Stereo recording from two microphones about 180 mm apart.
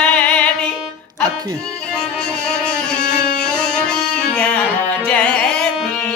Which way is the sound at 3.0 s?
55° left (ahead or behind).